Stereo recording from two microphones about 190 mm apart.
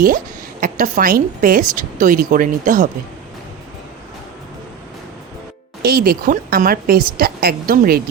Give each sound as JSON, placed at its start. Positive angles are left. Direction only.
{"t": 0.6, "sound": "a woman's voice", "side_deg": -45}
{"t": 5.8, "sound": "a woman's voice", "side_deg": -55}